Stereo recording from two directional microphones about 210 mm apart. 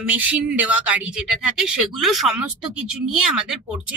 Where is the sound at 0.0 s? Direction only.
5° right (ahead or behind).